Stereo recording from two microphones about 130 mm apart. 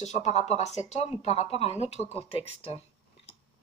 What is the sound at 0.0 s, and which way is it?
A woman's voice, 60° left (ahead or behind).